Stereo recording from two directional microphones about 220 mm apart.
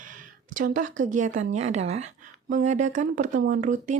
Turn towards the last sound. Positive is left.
turn(degrees=-35)  # may be behind; listen again after turning